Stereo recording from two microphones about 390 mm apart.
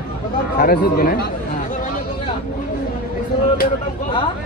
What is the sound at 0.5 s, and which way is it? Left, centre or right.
Speech, left.